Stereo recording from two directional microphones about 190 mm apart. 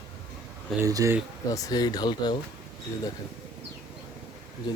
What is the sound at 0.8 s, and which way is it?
Speech, 15° right (ahead or behind).